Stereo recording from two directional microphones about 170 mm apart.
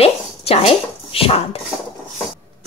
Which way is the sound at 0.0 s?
35° left (ahead or behind).